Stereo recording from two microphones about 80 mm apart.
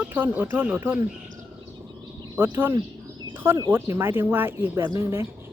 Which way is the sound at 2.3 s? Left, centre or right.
Right.